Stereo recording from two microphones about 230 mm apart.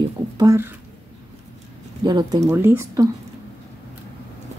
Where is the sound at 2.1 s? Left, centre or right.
Centre.